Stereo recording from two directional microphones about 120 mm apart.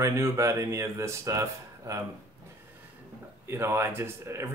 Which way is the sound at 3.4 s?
20° right (ahead or behind).